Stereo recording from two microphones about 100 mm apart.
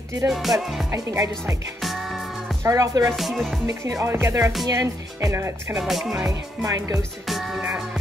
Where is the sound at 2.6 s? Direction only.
35° right (ahead or behind).